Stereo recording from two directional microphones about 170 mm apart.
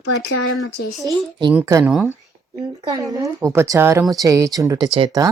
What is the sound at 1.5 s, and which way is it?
Speech, 20° right (ahead or behind).